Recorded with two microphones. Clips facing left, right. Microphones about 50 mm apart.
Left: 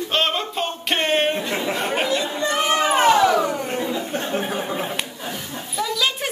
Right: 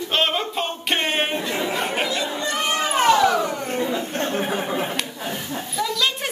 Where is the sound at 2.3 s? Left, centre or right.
Left.